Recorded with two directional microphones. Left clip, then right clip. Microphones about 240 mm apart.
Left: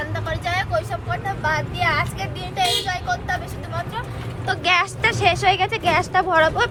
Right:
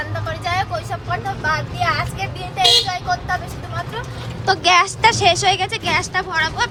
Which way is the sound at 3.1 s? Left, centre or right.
Centre.